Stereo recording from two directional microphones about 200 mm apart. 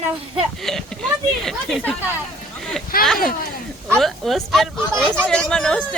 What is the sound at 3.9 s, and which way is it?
Speech, centre (ahead or behind).